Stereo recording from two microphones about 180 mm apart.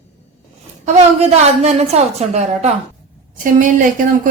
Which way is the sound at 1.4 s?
35° right (ahead or behind).